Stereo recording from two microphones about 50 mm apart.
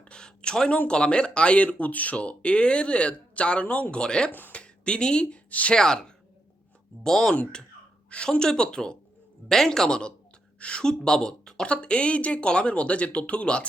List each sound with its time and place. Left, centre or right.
0.0 s a sound: centre
0.9 s speech: centre
4.3 s speech: left
4.5 s speech: centre
5.5 s speech: left
5.7 s speech: centre